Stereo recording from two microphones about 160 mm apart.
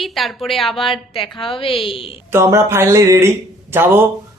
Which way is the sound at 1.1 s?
35° left (ahead or behind).